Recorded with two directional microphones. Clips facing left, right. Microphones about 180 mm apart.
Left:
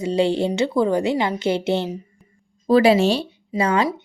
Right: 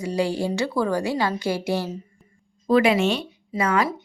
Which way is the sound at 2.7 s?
35° left (ahead or behind).